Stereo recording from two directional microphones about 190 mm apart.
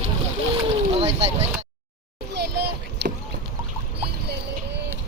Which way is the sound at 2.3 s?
60° right (ahead or behind).